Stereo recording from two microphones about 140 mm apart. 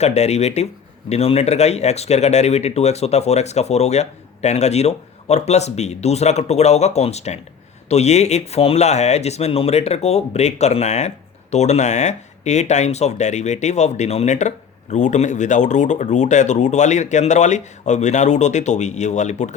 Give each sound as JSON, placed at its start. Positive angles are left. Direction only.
{"t": 0.0, "sound": "speech", "side_deg": 50}